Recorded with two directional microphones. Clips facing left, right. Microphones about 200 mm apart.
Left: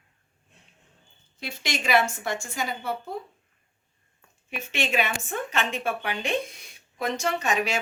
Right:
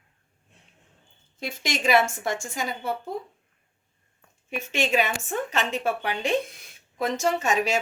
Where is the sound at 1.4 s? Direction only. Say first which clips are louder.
Right 3 dB; 50° right (ahead or behind).